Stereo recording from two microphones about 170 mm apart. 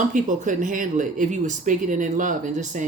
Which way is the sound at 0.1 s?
50° right (ahead or behind).